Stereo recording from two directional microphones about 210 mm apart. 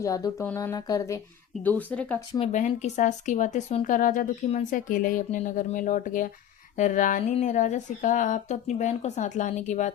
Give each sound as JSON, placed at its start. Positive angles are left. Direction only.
{"t": 0.0, "sound": "speech", "side_deg": 15}
{"t": 2.4, "sound": "speech", "side_deg": 35}